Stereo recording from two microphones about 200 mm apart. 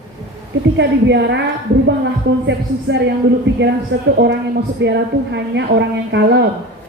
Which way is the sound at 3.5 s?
65° right (ahead or behind).